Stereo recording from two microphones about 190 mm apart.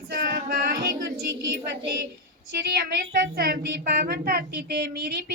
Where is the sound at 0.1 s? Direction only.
65° right (ahead or behind).